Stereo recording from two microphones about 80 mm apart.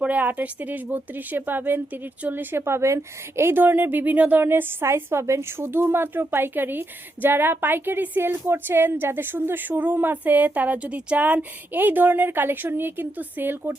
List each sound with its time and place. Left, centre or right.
0.0 s speech: centre